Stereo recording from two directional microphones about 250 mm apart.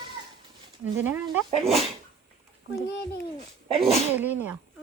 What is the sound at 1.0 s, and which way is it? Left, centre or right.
Speech, centre.